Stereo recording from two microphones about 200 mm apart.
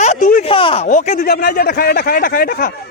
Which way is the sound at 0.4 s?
25° left (ahead or behind).